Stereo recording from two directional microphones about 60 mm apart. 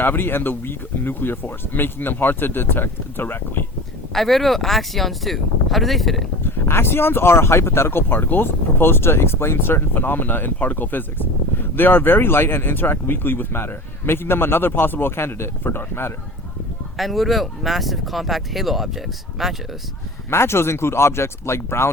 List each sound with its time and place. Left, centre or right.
0.0 s speech: left
4.1 s speech: centre
6.4 s speech: left
17.0 s speech: centre
20.3 s speech: left